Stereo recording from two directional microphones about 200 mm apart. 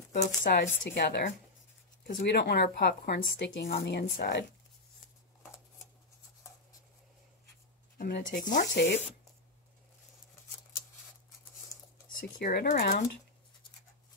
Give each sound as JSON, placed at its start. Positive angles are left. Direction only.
{"t": 0.1, "sound": "speech", "side_deg": 40}
{"t": 0.5, "sound": "speech", "side_deg": 50}
{"t": 8.0, "sound": "speech", "side_deg": 45}
{"t": 11.7, "sound": "dishes", "side_deg": 15}
{"t": 12.2, "sound": "speech", "side_deg": 45}